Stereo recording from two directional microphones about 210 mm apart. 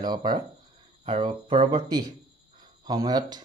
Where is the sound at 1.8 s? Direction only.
15° right (ahead or behind).